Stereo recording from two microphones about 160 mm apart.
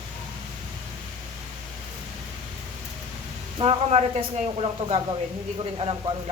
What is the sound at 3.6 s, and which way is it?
Speech, 40° right (ahead or behind).